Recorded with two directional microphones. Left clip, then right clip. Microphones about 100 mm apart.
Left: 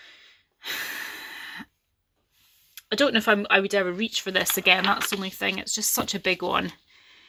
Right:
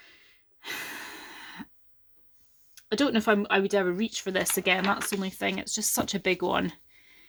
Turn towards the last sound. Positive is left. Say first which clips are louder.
# left 3 dB
turn(degrees=-40)  # may be behind; listen again after turning